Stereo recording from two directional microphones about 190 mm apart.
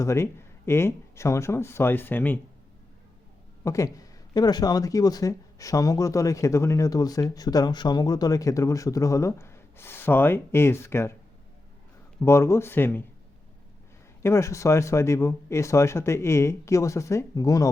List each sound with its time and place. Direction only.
0.0 s speech: 15° left (ahead or behind)
3.6 s speech: 15° left (ahead or behind)
12.2 s speech: 15° left (ahead or behind)
14.2 s speech: 15° left (ahead or behind)